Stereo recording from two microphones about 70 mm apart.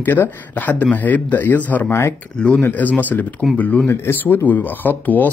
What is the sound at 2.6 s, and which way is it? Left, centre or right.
Speech, left.